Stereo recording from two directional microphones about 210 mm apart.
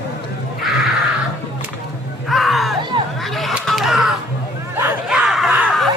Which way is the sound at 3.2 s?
Centre (ahead or behind).